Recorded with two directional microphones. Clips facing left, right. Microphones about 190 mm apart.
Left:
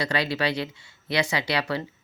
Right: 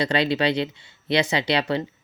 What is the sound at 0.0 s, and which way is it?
Speech, 25° right (ahead or behind).